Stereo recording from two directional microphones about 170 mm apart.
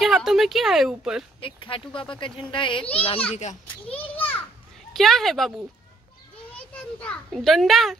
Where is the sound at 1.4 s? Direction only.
30° left (ahead or behind).